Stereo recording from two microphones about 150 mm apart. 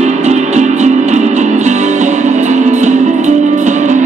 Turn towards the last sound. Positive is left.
turn(degrees=-55)  # may be behind; listen again after turning